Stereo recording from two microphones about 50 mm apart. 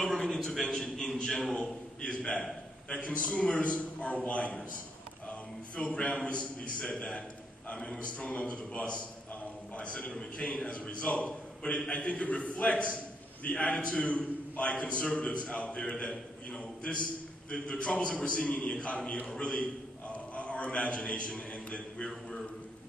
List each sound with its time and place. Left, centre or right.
0.1 s a man's voice: centre
5.8 s a man's voice: left
19.2 s a sound: centre